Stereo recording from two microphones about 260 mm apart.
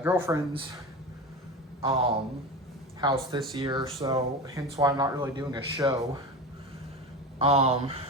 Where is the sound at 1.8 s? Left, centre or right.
Right.